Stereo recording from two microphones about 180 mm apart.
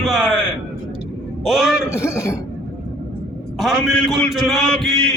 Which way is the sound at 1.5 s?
Centre (ahead or behind).